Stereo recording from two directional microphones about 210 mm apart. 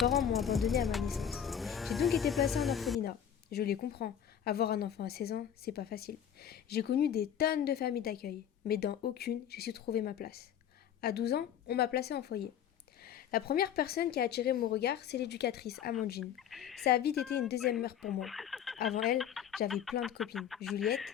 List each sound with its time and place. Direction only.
0.0 s speech: centre (ahead or behind)
3.0 s a woman's voice: 45° left (ahead or behind)
16.2 s speech: centre (ahead or behind)
16.8 s a woman's voice: 50° left (ahead or behind)
18.0 s speech: centre (ahead or behind)